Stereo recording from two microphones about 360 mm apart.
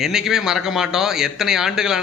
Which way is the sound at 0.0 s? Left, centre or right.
Centre.